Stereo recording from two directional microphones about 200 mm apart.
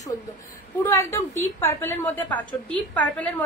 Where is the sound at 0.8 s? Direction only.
15° left (ahead or behind).